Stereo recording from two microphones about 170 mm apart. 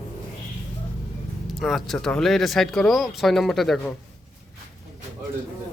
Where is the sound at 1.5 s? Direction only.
Centre (ahead or behind).